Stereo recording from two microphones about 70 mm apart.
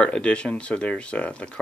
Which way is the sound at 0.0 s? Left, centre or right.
Centre.